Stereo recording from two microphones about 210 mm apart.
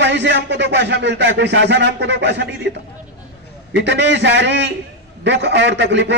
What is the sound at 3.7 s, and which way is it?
A man's voice, 60° right (ahead or behind).